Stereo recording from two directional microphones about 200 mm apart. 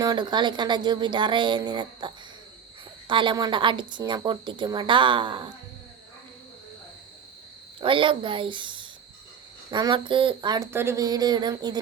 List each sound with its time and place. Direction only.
0.0 s a woman's voice: 20° right (ahead or behind)
7.8 s a woman's voice: 25° right (ahead or behind)